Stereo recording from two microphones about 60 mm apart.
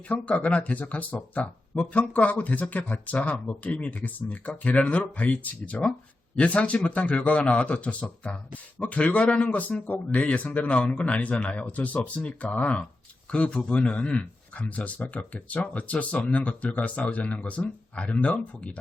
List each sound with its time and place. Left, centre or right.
0.1 s speech: left